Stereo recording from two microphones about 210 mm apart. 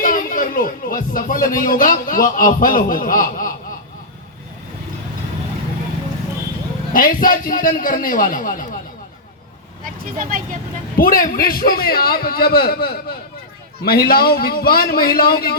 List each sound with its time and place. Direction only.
0.0 s speech: 40° left (ahead or behind)
6.9 s a man's voice: 40° left (ahead or behind)
9.8 s speech: 40° right (ahead or behind)
10.9 s a man's voice: 40° left (ahead or behind)